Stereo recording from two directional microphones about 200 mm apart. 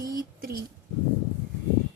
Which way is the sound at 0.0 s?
45° right (ahead or behind).